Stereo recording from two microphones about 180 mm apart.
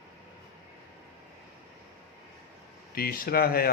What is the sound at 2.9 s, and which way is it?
Speech, 55° left (ahead or behind).